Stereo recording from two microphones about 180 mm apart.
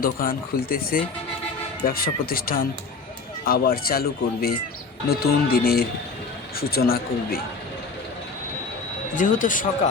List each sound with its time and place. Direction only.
0.0 s speech: 50° left (ahead or behind)
9.1 s speech: 45° left (ahead or behind)